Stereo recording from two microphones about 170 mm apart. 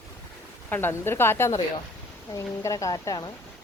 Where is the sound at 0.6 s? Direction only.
10° left (ahead or behind).